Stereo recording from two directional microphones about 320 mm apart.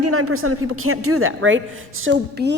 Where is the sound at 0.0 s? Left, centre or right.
Right.